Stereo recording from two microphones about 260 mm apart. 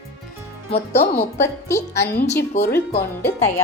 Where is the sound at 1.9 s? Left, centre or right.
Left.